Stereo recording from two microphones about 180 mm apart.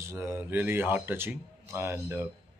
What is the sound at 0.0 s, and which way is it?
Speech, 15° right (ahead or behind).